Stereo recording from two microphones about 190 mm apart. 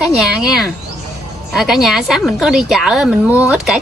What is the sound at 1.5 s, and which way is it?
Speech, centre (ahead or behind).